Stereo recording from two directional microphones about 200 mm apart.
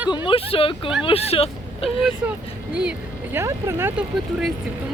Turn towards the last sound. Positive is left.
turn(degrees=-5)  # may be behind; listen again after turning